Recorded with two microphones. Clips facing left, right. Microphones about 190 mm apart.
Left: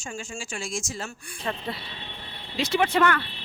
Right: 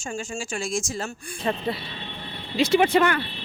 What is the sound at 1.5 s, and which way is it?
Speech, 20° right (ahead or behind).